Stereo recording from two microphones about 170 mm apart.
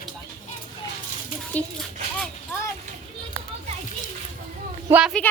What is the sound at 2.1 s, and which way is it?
Vehicle, 5° left (ahead or behind).